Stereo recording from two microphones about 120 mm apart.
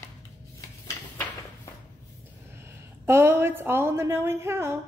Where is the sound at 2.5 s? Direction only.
20° right (ahead or behind).